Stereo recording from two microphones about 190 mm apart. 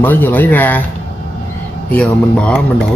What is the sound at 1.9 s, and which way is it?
Speech, 5° left (ahead or behind).